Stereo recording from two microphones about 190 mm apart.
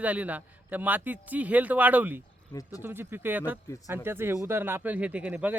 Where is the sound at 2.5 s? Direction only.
20° left (ahead or behind).